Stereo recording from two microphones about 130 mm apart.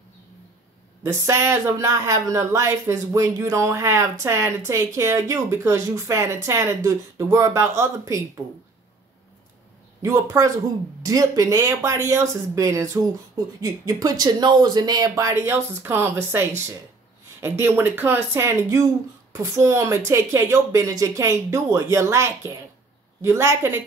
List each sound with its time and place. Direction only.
1.0 s speech: 20° right (ahead or behind)
10.0 s speech: 25° right (ahead or behind)